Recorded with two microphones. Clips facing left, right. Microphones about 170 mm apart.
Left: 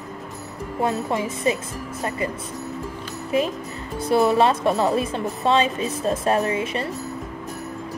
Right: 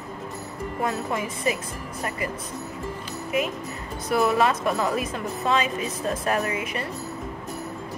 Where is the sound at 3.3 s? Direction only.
30° left (ahead or behind).